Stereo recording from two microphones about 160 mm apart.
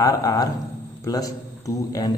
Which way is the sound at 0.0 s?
20° left (ahead or behind).